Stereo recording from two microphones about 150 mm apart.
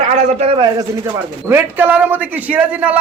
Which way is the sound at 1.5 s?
15° right (ahead or behind).